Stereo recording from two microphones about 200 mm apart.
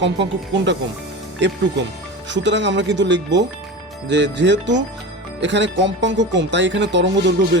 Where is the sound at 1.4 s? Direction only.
60° right (ahead or behind).